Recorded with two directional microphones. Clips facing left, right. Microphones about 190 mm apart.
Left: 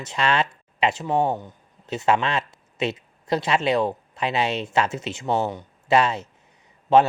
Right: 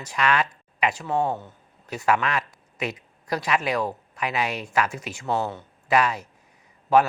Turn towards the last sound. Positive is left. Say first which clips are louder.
# left 2 dB
turn(degrees=25)  # may be behind; listen again after turning